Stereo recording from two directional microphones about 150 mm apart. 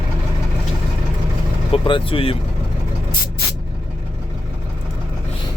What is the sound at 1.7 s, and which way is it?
Speech, 35° left (ahead or behind).